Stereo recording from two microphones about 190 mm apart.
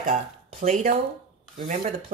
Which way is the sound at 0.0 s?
40° right (ahead or behind).